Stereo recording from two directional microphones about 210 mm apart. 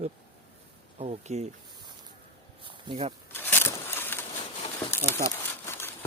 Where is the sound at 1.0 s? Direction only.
30° right (ahead or behind).